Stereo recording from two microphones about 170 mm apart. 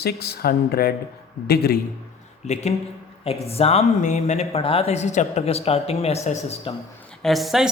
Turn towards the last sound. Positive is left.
turn(degrees=0)  # may be behind; listen again after turning